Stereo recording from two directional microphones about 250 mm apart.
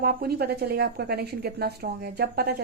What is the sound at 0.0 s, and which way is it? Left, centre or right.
A woman's voice, right.